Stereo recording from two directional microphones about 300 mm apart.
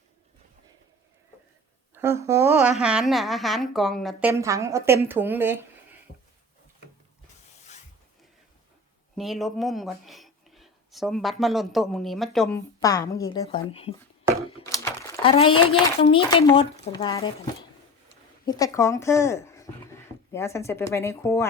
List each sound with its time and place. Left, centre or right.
2.0 s a woman's voice: centre
9.1 s speech: centre
14.5 s a sound: centre
16.0 s speech: centre